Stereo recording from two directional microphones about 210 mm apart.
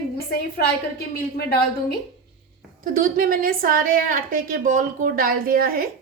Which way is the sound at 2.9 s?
40° right (ahead or behind).